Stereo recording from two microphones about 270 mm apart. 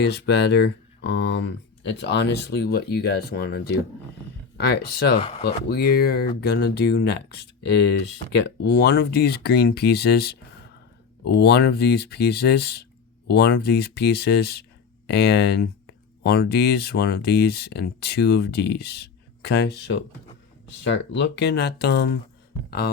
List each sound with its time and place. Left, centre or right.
0.0 s speech: left